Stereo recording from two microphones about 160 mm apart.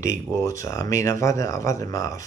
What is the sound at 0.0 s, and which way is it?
Speech, 20° left (ahead or behind).